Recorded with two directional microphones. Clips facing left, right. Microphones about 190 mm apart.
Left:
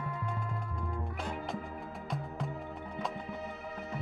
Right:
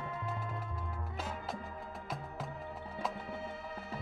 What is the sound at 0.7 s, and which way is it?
Music, 5° right (ahead or behind).